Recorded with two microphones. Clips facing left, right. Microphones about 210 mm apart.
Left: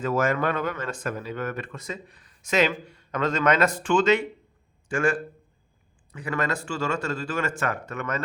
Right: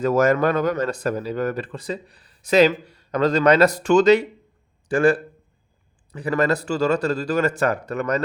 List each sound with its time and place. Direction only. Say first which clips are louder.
0.0 s speech: right 6 dB; 40° right (ahead or behind)